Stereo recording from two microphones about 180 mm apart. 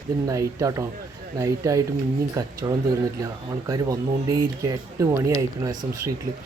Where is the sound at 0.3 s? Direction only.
20° right (ahead or behind).